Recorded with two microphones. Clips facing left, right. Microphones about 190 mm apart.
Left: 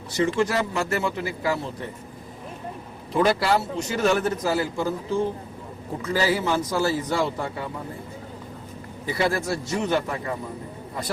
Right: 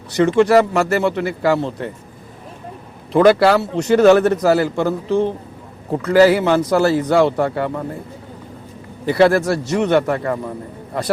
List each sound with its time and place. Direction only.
0.1 s a man's voice: 70° right (ahead or behind)
3.1 s a man's voice: 70° right (ahead or behind)
9.0 s a man's voice: 70° right (ahead or behind)